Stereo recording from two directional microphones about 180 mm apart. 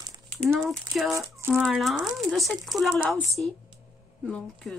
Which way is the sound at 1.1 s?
15° right (ahead or behind).